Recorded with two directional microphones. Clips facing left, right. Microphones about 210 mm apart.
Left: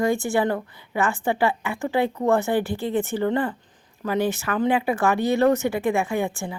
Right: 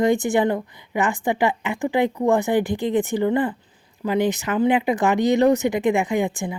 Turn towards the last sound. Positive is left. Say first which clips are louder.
# right 3 dB
turn(degrees=-15)  # may be behind; listen again after turning